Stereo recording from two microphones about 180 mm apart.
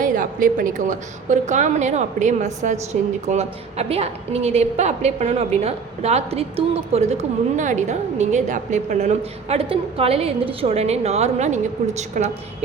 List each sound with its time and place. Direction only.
0.0 s a woman's voice: 50° right (ahead or behind)